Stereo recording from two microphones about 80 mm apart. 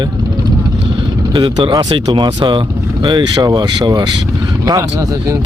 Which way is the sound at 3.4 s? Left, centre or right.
Right.